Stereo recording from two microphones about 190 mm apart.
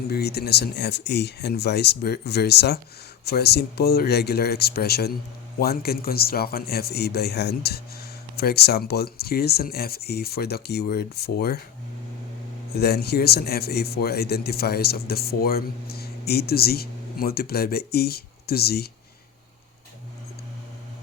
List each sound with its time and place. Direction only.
0.1 s a man's voice: 55° left (ahead or behind)
12.7 s a man's voice: 55° left (ahead or behind)